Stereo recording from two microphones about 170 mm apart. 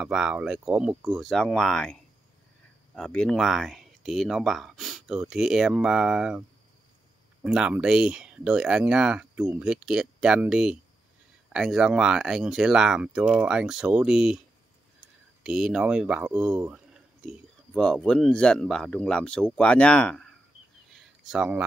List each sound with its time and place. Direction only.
0.0 s speech: 5° right (ahead or behind)
7.4 s speech: 5° right (ahead or behind)
15.4 s speech: 5° right (ahead or behind)
20.9 s a sound: 5° right (ahead or behind)